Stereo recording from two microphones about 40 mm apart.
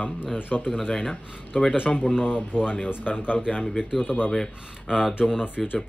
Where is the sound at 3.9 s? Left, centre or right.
Centre.